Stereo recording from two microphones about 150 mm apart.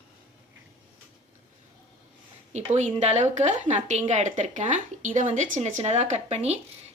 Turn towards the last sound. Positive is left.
turn(degrees=-45)  # may be behind; listen again after turning